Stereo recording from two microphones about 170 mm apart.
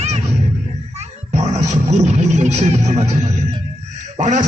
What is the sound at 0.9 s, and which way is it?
A child's voice, 40° right (ahead or behind).